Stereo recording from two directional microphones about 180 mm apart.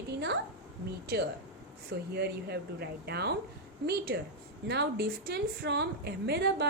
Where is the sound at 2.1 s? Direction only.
65° right (ahead or behind).